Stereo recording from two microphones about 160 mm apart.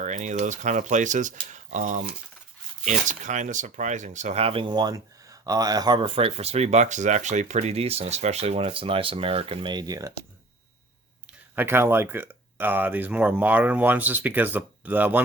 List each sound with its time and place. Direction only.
0.0 s speech: 50° right (ahead or behind); by 10.1 s 25° right (ahead or behind)
11.5 s speech: 15° right (ahead or behind)